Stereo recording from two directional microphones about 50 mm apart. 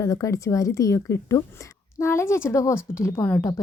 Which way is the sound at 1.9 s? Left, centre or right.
Left.